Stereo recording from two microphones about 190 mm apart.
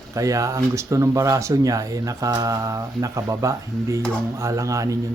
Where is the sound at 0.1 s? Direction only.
15° right (ahead or behind).